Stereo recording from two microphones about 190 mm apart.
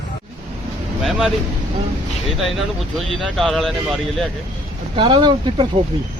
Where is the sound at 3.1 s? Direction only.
Centre (ahead or behind).